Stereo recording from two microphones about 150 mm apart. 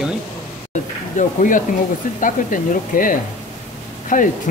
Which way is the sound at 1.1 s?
60° left (ahead or behind).